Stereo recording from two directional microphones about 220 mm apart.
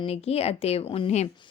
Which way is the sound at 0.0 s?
25° left (ahead or behind).